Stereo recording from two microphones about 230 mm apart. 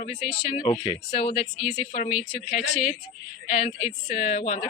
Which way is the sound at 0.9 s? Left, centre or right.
Left.